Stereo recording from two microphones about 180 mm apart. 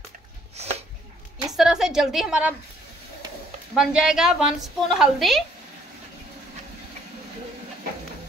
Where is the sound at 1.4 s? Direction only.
Centre (ahead or behind).